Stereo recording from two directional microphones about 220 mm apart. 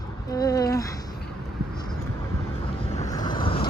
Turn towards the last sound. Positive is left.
turn(degrees=25)  # may be behind; listen again after turning